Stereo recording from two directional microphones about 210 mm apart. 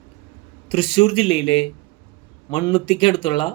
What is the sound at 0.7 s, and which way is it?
Speech, 25° left (ahead or behind).